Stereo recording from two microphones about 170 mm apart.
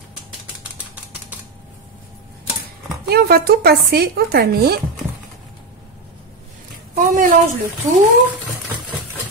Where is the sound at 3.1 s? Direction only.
65° right (ahead or behind).